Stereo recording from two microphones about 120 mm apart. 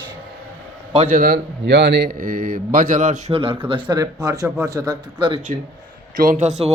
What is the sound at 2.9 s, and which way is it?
Speech, 90° right.